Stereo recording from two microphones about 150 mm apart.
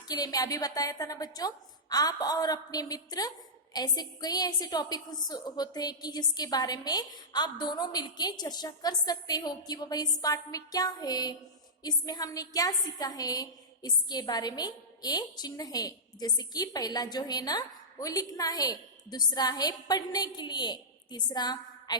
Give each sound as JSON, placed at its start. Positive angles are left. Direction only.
{"t": 0.1, "sound": "a woman's voice", "side_deg": 25}